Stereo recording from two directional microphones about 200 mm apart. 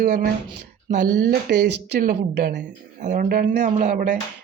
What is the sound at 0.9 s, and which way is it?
Speech, 40° right (ahead or behind).